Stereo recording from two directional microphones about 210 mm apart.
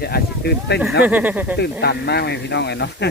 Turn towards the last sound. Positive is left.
turn(degrees=55)  # may be behind; listen again after turning